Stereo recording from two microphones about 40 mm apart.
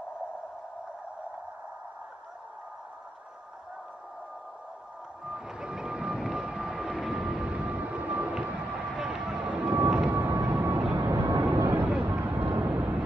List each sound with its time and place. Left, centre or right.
5.2 s vehicle: centre
7.4 s vehicle: right
10.5 s vehicle: right
11.1 s vehicle: right
11.8 s a sound: right
12.1 s vehicle: right